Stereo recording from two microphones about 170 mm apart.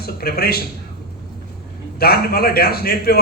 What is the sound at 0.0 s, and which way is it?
Speech, 65° left (ahead or behind).